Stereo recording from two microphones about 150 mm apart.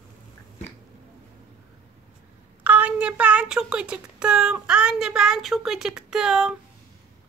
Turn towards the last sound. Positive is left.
turn(degrees=-5)  # may be behind; listen again after turning